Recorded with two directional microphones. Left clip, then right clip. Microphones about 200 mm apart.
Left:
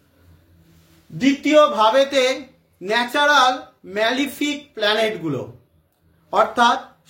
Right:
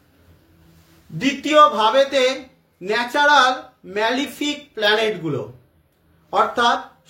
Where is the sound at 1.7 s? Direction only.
20° left (ahead or behind).